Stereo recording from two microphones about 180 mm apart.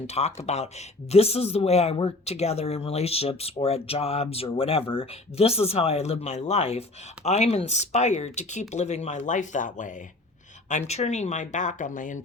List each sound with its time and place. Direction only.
0.1 s speech: 35° left (ahead or behind)